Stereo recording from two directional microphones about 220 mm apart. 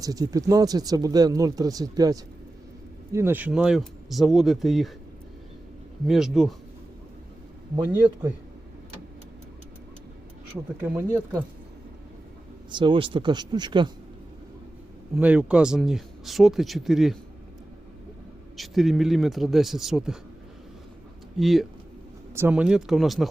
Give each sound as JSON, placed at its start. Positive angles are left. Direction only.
{"t": 0.0, "sound": "speech", "side_deg": -15}
{"t": 6.1, "sound": "speech", "side_deg": 0}
{"t": 7.8, "sound": "speech", "side_deg": -5}
{"t": 10.8, "sound": "speech", "side_deg": -10}
{"t": 12.7, "sound": "speech", "side_deg": -20}
{"t": 15.1, "sound": "speech", "side_deg": -5}
{"t": 18.5, "sound": "speech", "side_deg": 0}
{"t": 21.3, "sound": "speech", "side_deg": 0}